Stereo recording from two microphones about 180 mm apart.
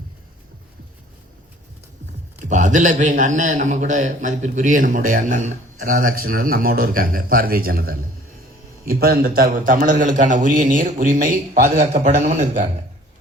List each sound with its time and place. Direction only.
2.5 s a man's voice: 45° right (ahead or behind)